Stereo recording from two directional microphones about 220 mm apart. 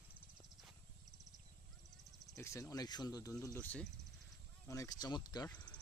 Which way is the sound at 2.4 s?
15° left (ahead or behind).